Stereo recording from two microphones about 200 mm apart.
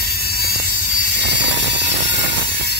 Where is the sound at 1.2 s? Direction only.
60° right (ahead or behind).